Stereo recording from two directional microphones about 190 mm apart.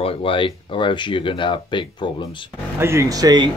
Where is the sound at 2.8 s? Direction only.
15° right (ahead or behind).